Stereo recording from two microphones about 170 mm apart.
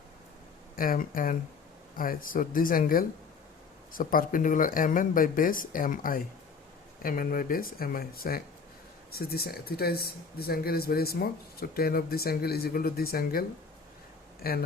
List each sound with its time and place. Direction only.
0.8 s speech: 55° left (ahead or behind)
14.4 s speech: 65° left (ahead or behind)